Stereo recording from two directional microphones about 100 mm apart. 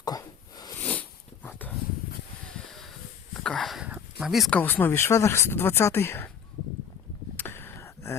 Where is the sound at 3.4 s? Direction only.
5° left (ahead or behind).